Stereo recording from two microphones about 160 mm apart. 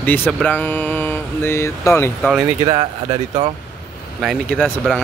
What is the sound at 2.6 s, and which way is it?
Speech, 35° right (ahead or behind).